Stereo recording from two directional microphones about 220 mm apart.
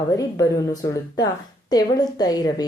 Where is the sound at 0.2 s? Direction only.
15° left (ahead or behind).